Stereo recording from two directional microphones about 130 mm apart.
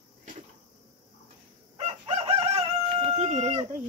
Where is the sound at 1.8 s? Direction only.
45° right (ahead or behind).